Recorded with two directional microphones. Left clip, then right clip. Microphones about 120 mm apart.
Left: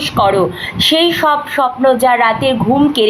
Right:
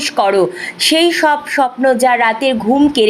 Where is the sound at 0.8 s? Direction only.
40° right (ahead or behind).